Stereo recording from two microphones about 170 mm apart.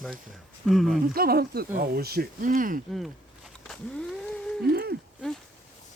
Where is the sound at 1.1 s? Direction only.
65° right (ahead or behind).